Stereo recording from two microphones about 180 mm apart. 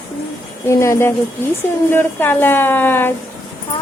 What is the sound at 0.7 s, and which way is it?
A woman's voice, 15° left (ahead or behind).